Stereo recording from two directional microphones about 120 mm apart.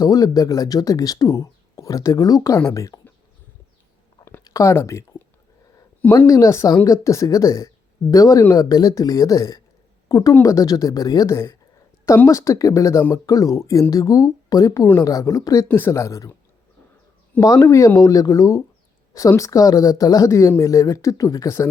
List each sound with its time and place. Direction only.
0.0 s speech: 30° left (ahead or behind)
4.4 s speech: 25° left (ahead or behind)
6.2 s a woman's voice: 30° left (ahead or behind)
17.4 s speech: 25° left (ahead or behind)